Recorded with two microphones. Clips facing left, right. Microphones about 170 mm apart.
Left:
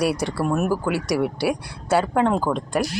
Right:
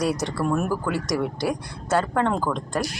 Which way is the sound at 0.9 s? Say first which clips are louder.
Left 2 dB; 70° left (ahead or behind).